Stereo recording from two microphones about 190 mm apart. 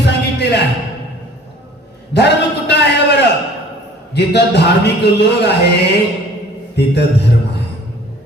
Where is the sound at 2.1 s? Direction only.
60° left (ahead or behind).